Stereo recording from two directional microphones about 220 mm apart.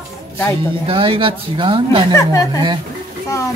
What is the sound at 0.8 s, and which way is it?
Speech, 25° right (ahead or behind).